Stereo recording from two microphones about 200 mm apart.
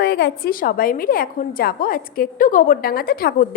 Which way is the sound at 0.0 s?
55° left (ahead or behind).